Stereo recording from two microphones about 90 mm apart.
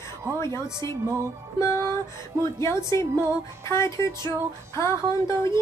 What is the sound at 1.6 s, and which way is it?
Music, 30° left (ahead or behind).